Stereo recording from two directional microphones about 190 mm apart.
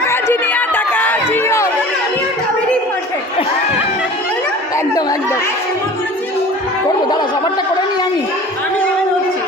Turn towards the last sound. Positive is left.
turn(degrees=20)  # may be behind; listen again after turning